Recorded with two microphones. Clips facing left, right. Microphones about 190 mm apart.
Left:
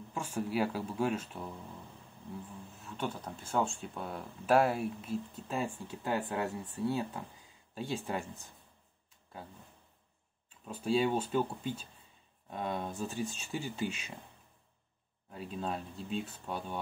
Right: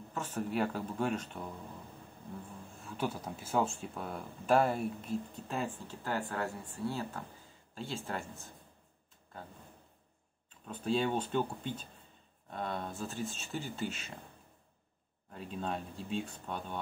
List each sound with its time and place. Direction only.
0.1 s speech: 10° left (ahead or behind)
2.8 s speech: 5° right (ahead or behind); by 8.5 s 15° left (ahead or behind)
10.6 s speech: 10° left (ahead or behind)
15.3 s speech: centre (ahead or behind)